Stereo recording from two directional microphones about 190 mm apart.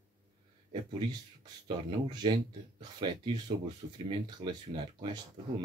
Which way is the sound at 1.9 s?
25° right (ahead or behind).